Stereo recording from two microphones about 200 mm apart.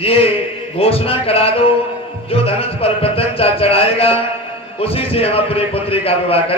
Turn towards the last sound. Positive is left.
turn(degrees=30)  # may be behind; listen again after turning